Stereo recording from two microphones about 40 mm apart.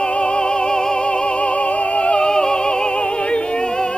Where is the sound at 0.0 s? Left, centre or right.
Left.